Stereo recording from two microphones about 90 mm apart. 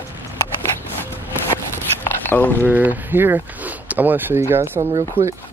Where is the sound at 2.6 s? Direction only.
20° right (ahead or behind).